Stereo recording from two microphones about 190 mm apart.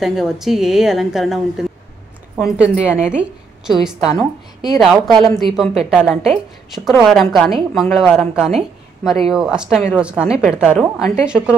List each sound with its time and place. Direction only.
0.0 s a woman's voice: centre (ahead or behind)
5.1 s speech: 25° right (ahead or behind)
5.4 s a woman's voice: centre (ahead or behind)